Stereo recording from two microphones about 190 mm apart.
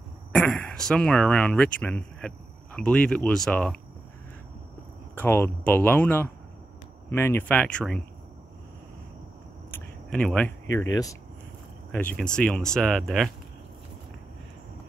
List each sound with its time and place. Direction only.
0.3 s speech: 5° left (ahead or behind)
5.1 s speech: 10° left (ahead or behind)
9.7 s a sound: 5° left (ahead or behind)
11.9 s speech: 10° left (ahead or behind)